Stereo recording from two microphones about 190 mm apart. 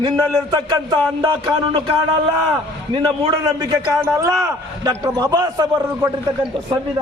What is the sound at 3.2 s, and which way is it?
A man's voice, 20° right (ahead or behind).